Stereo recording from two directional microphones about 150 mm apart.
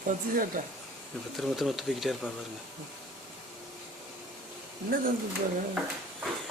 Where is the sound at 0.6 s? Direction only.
60° right (ahead or behind).